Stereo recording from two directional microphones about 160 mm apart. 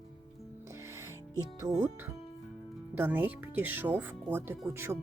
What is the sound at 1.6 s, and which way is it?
Speech, 20° right (ahead or behind).